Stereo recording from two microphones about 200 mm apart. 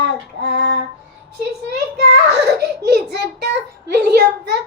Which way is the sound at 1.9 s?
55° right (ahead or behind).